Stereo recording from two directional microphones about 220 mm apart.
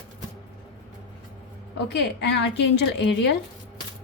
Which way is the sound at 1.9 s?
50° left (ahead or behind).